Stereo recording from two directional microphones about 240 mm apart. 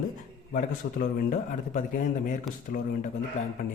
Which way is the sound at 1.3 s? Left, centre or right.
Left.